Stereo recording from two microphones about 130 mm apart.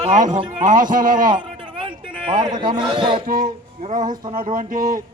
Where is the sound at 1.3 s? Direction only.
40° right (ahead or behind).